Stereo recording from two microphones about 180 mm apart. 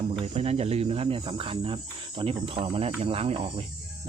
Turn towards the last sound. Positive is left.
turn(degrees=-35)  # may be behind; listen again after turning